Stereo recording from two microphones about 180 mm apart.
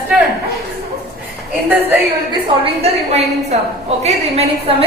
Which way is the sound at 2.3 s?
30° right (ahead or behind).